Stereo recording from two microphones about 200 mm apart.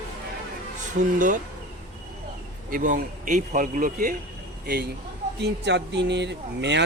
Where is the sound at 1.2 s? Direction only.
40° right (ahead or behind).